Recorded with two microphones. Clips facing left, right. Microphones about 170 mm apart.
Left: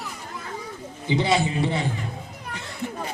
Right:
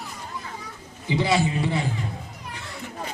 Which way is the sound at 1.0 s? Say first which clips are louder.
Even; 25° left (ahead or behind).